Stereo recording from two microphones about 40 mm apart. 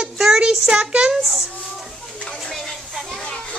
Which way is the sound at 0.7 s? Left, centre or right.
Right.